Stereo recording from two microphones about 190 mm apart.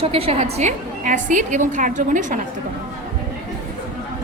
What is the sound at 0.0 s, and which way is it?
A woman's voice, 30° right (ahead or behind).